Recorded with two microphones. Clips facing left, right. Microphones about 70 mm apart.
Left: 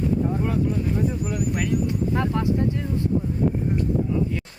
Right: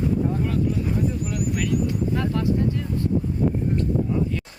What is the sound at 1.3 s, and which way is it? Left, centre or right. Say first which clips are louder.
Speech: even; left.